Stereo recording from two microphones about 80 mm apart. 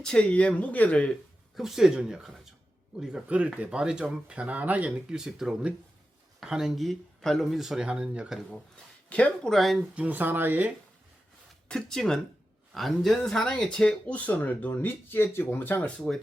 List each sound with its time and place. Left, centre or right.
0.0 s speech: centre
1.5 s speech: centre
9.0 s speech: centre
9.5 s speech: centre
9.9 s speech: centre
11.7 s speech: centre; by 15.9 s left
16.0 s speech: centre